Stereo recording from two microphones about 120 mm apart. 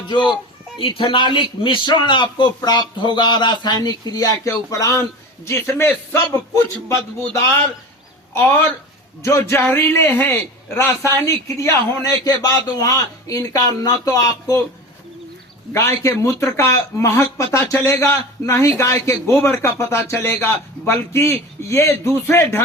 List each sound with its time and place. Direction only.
0.1 s a man's voice: 40° left (ahead or behind)
15.7 s a man's voice: 25° left (ahead or behind)